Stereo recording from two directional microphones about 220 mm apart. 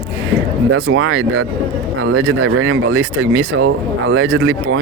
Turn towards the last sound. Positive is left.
turn(degrees=-60)  # may be behind; listen again after turning